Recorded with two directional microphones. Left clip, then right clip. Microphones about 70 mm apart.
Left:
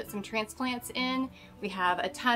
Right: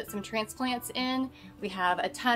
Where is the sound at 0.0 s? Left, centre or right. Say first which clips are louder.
Even; centre.